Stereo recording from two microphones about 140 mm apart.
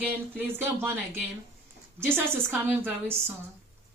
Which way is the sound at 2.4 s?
5° right (ahead or behind).